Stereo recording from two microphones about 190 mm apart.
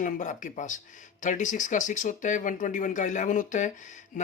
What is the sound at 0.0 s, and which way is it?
Speech, 40° left (ahead or behind).